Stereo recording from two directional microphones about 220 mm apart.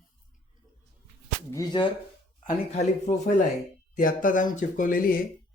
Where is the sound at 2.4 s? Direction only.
35° left (ahead or behind).